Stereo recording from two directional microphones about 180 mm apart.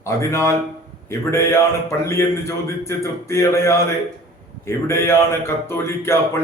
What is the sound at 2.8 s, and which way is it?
A man's voice, 15° left (ahead or behind).